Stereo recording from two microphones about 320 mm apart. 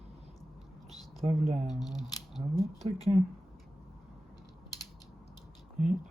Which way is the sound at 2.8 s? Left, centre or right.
Centre.